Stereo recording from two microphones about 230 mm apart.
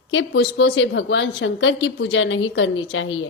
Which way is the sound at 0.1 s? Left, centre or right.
Left.